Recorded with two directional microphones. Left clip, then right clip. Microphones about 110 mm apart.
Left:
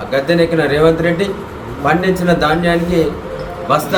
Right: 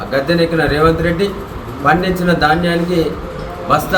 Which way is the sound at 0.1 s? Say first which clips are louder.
Left 1 dB; 5° left (ahead or behind).